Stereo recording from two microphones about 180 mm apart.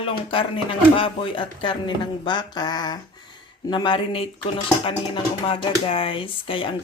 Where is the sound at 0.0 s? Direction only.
30° left (ahead or behind).